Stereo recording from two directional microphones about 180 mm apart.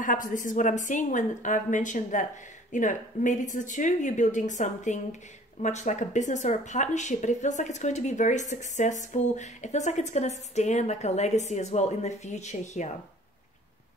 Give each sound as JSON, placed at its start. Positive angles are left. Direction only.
{"t": 0.0, "sound": "speech", "side_deg": 45}